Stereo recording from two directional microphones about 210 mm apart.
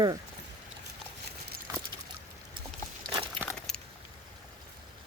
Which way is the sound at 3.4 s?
5° left (ahead or behind).